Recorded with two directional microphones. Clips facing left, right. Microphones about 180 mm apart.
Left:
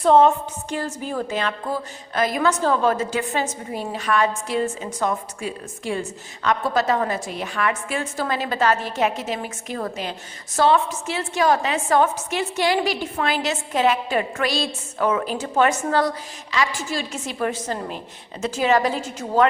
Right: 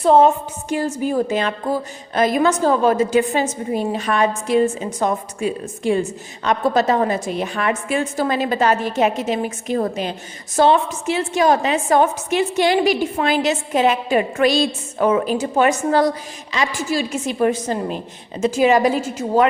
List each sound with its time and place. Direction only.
0.0 s a woman's voice: 5° right (ahead or behind)